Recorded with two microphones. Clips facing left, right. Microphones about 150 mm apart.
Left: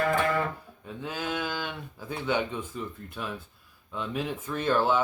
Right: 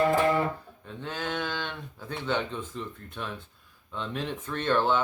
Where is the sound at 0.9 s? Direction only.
10° left (ahead or behind).